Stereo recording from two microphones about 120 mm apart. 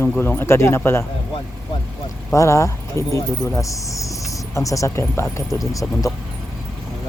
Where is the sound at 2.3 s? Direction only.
25° left (ahead or behind).